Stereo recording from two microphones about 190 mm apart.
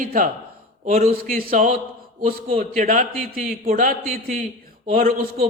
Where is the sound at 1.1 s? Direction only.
50° right (ahead or behind).